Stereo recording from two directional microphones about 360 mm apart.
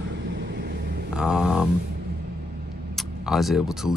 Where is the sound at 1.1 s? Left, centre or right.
Centre.